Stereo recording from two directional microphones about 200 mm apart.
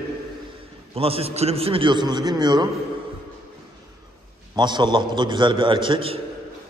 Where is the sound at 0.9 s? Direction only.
30° right (ahead or behind).